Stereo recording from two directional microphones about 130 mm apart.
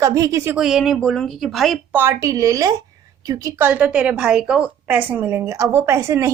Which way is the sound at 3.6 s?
10° right (ahead or behind).